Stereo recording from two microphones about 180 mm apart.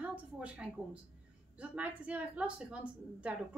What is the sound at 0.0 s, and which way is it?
A woman's voice, 10° right (ahead or behind).